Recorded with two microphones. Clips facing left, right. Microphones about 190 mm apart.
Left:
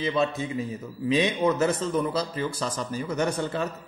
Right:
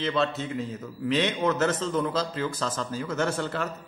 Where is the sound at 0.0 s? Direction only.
10° left (ahead or behind).